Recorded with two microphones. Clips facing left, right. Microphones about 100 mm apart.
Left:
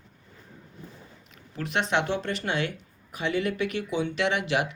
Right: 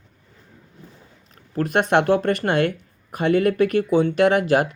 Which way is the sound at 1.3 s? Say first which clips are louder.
Right 8 dB; 45° right (ahead or behind).